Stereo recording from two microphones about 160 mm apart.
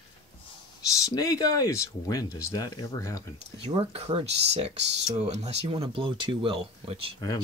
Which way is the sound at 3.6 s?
40° right (ahead or behind).